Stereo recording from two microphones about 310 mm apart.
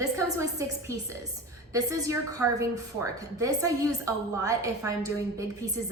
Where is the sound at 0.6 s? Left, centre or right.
Centre.